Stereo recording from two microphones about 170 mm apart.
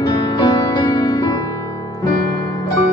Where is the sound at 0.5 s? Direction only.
25° left (ahead or behind).